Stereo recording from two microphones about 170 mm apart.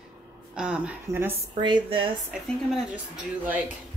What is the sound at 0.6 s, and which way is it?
Speech, 5° right (ahead or behind).